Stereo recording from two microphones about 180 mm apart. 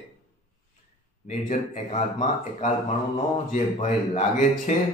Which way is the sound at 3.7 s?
45° left (ahead or behind).